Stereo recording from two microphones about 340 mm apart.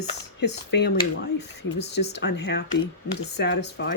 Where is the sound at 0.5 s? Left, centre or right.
Left.